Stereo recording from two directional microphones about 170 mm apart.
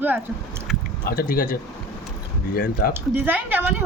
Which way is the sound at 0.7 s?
Centre (ahead or behind).